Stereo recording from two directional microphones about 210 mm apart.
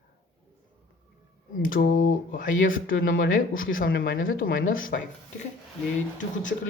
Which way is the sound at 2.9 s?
65° left (ahead or behind).